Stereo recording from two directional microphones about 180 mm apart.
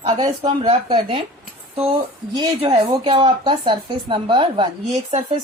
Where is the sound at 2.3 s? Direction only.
30° right (ahead or behind).